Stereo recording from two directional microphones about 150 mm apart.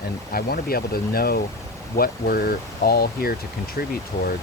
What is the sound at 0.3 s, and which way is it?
Speech, 80° left.